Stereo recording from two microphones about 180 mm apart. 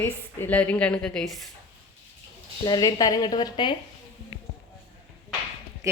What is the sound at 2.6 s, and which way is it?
A woman's voice, 20° left (ahead or behind).